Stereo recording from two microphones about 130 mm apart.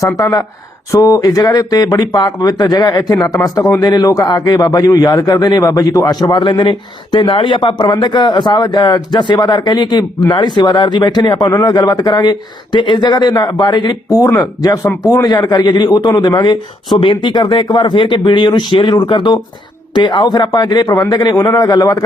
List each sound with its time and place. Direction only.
0.0 s speech: 25° left (ahead or behind)